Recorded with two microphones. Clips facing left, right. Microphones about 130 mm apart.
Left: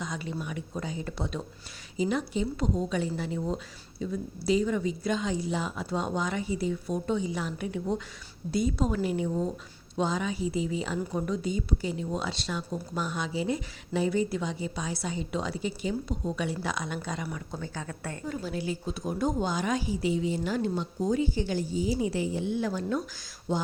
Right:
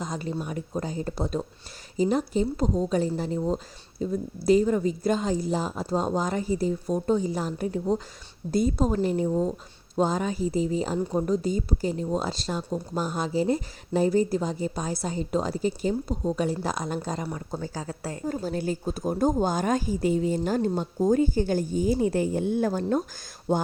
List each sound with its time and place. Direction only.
0.0 s a woman's voice: 40° right (ahead or behind)
18.3 s a woman's voice: 40° right (ahead or behind)